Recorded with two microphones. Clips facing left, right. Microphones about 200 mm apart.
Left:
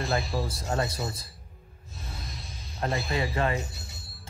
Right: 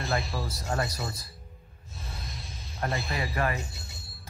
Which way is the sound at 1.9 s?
Centre (ahead or behind).